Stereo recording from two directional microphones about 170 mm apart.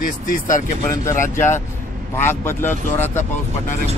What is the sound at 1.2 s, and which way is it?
Speech, 15° left (ahead or behind).